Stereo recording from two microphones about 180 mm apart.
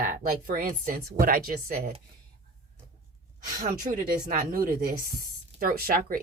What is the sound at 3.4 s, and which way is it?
A woman's voice, 50° right (ahead or behind).